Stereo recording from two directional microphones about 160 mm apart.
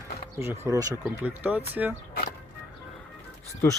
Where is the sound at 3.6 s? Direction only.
15° left (ahead or behind).